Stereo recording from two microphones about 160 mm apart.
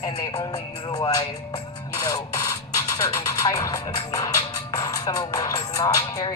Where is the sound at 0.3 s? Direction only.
25° left (ahead or behind).